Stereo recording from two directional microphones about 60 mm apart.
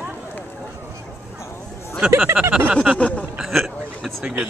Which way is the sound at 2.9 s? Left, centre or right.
Left.